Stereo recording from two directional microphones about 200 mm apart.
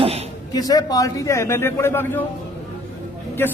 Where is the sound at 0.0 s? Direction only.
30° right (ahead or behind).